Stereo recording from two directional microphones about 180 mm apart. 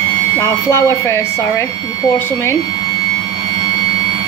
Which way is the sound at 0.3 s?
15° left (ahead or behind).